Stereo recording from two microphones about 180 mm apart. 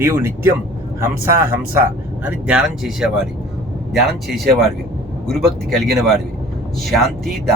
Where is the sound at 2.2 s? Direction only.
5° right (ahead or behind).